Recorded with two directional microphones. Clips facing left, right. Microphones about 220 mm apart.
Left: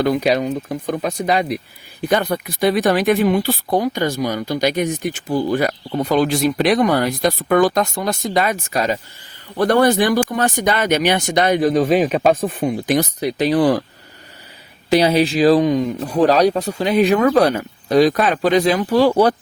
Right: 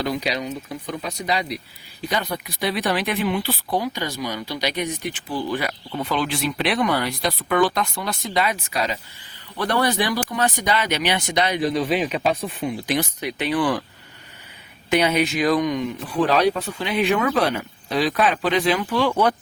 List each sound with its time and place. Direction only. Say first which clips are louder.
0.0 s speech: left 8 dB; 50° left (ahead or behind)
14.8 s speech: left 5 dB; 35° left (ahead or behind)